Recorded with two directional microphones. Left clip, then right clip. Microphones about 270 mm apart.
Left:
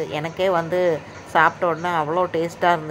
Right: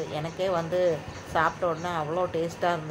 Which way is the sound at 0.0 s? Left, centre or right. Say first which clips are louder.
Left 7 dB; centre.